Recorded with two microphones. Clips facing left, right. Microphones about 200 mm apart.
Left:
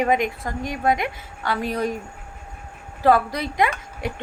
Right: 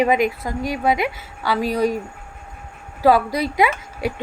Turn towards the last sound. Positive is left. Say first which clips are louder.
# right 5 dB
turn(degrees=-5)  # may be behind; listen again after turning